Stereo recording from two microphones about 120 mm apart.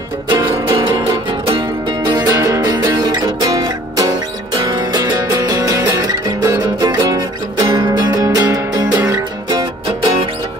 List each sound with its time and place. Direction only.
0.3 s music: 40° right (ahead or behind)